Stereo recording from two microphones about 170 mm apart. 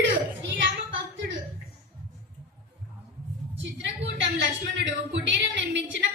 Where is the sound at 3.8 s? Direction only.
90° right.